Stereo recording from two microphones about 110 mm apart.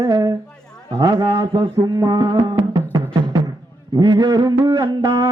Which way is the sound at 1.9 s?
30° right (ahead or behind).